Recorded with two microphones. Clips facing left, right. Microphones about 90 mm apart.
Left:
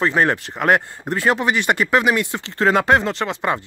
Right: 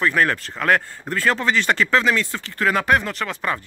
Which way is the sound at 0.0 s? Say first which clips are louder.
Left 2 dB; 25° left (ahead or behind).